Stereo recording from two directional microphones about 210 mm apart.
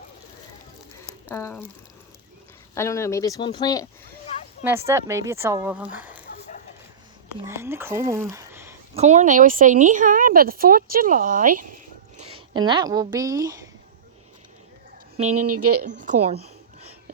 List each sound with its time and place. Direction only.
1.3 s speech: 10° left (ahead or behind)
2.7 s speech: 15° left (ahead or behind)
4.6 s speech: 10° right (ahead or behind)
7.4 s speech: 10° right (ahead or behind)
9.0 s a woman's voice: 35° right (ahead or behind)
12.3 s speech: 20° right (ahead or behind)
15.2 s a woman's voice: 35° right (ahead or behind)
15.5 s speech: 90° right